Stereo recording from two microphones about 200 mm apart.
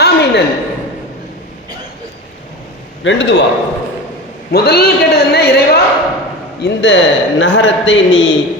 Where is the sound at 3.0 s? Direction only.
65° left (ahead or behind).